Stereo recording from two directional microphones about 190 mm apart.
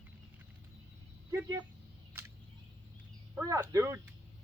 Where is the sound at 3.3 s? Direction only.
15° right (ahead or behind).